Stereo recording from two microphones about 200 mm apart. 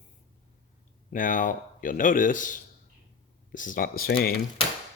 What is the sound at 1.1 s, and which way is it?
A man's voice, 40° left (ahead or behind).